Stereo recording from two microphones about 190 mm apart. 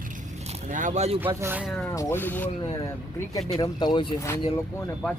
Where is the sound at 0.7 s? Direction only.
40° right (ahead or behind).